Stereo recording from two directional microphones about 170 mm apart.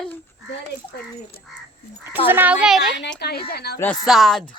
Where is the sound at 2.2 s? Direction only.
10° right (ahead or behind).